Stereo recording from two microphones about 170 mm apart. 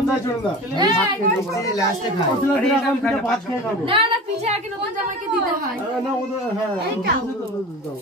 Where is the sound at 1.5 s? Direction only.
20° left (ahead or behind).